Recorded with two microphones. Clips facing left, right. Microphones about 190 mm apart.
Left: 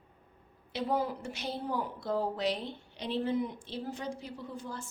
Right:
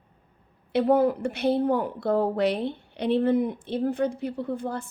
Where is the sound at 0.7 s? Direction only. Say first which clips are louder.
Right 11 dB; 55° right (ahead or behind).